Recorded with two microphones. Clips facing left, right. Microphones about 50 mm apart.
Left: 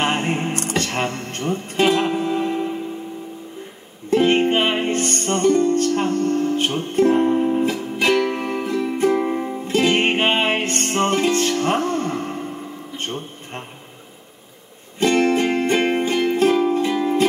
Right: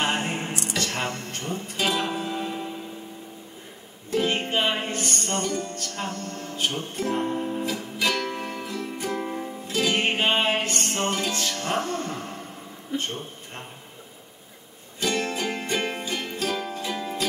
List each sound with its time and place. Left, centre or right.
0.0 s music: left
0.8 s speech: left
4.1 s music: left
12.9 s a sound: left
15.0 s music: left